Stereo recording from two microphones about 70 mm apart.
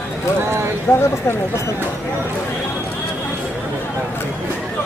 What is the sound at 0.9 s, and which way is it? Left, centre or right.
Speech, left.